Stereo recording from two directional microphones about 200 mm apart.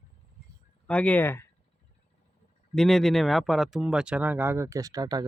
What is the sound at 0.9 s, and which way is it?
Speech, 5° left (ahead or behind).